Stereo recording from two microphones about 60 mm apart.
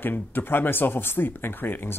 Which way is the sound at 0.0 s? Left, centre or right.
Left.